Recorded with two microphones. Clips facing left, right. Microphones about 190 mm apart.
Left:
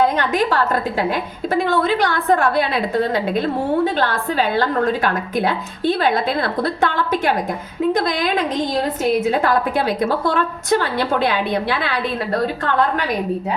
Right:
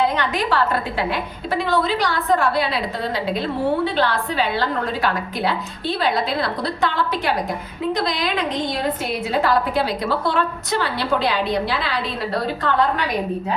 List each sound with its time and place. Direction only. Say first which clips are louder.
0.0 s a woman's voice: left 3 dB; 45° left (ahead or behind)